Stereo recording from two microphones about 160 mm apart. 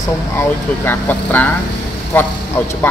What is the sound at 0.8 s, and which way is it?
Speech, 10° left (ahead or behind).